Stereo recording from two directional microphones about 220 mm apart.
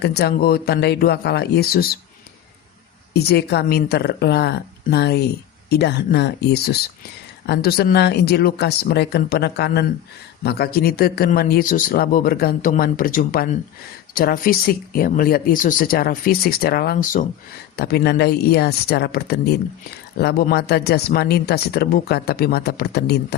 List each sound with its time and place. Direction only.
0.0 s speech: 45° left (ahead or behind)
3.1 s speech: 45° left (ahead or behind)